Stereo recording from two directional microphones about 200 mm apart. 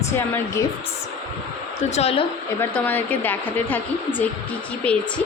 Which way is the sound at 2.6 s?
10° left (ahead or behind).